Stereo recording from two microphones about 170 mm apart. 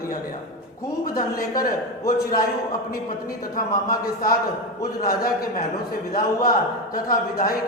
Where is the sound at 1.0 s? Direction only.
55° left (ahead or behind).